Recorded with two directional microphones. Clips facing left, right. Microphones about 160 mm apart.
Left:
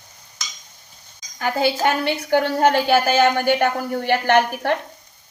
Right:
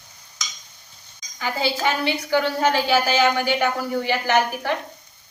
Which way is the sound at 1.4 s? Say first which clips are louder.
Left 4 dB; 50° left (ahead or behind).